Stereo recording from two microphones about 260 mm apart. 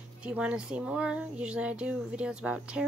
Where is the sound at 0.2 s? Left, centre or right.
Centre.